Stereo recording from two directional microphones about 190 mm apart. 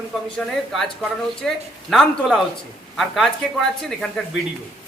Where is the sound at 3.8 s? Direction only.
5° left (ahead or behind).